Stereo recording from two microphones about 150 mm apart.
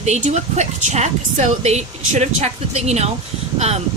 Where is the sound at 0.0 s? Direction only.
50° right (ahead or behind).